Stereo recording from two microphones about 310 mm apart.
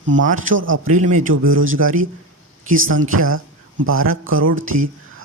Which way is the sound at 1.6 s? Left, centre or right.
Right.